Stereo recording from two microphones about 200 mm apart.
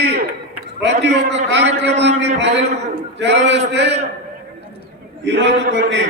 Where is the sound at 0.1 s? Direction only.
60° right (ahead or behind).